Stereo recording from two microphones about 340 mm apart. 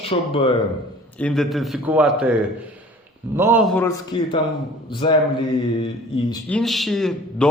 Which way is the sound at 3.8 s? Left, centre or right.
Centre.